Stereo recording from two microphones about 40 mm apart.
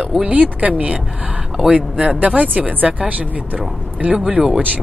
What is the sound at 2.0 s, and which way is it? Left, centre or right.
Speech, right.